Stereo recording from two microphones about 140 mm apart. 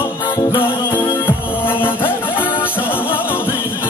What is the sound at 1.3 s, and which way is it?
Music, 15° left (ahead or behind).